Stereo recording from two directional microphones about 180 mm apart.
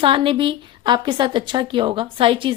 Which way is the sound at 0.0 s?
30° right (ahead or behind).